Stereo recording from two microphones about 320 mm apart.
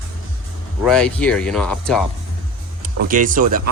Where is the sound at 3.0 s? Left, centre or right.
Right.